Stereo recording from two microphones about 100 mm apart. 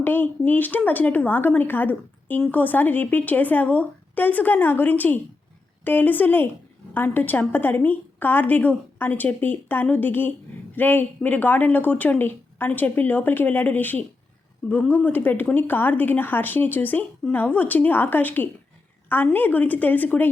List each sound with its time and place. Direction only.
0.0 s a woman's voice: 20° left (ahead or behind)